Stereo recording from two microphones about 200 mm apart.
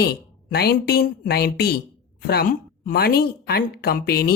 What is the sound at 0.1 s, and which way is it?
A woman's voice, 50° left (ahead or behind).